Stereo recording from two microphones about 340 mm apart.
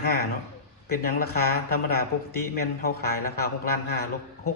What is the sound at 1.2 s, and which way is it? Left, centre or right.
A man's voice, left.